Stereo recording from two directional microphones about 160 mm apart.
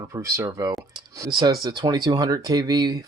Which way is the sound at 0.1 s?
15° right (ahead or behind).